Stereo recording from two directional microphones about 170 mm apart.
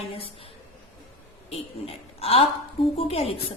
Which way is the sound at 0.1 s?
35° left (ahead or behind).